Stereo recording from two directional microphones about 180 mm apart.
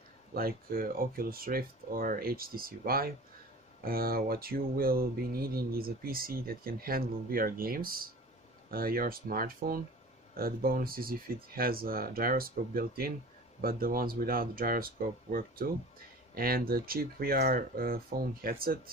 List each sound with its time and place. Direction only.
0.3 s speech: 55° right (ahead or behind)